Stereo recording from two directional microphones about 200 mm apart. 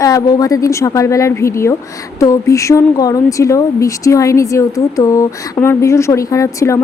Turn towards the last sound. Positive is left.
turn(degrees=15)  # may be behind; listen again after turning